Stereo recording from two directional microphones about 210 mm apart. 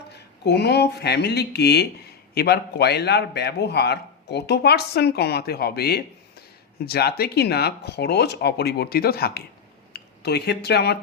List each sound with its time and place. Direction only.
0.1 s a man's voice: 50° left (ahead or behind)